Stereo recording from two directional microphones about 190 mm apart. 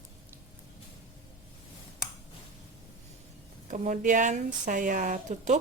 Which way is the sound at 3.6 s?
40° right (ahead or behind).